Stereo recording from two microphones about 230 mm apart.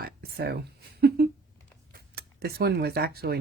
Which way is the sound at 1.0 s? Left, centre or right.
Right.